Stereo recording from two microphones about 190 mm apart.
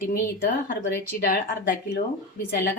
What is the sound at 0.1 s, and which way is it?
A woman's voice, 50° left (ahead or behind).